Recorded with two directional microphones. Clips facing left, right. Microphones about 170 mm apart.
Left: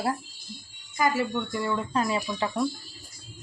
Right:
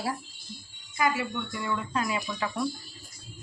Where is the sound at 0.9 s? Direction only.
40° left (ahead or behind).